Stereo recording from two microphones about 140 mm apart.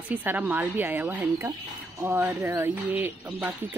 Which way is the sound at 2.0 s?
15° right (ahead or behind).